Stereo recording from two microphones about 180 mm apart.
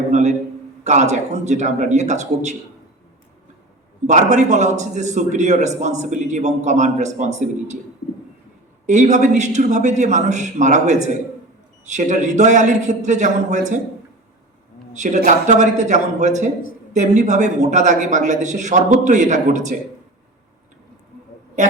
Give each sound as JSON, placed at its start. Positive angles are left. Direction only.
{"t": 0.1, "sound": "a man's voice", "side_deg": -40}
{"t": 4.0, "sound": "a man's voice", "side_deg": -40}
{"t": 8.9, "sound": "a man's voice", "side_deg": -40}
{"t": 14.9, "sound": "a man's voice", "side_deg": -40}
{"t": 21.6, "sound": "a man's voice", "side_deg": -40}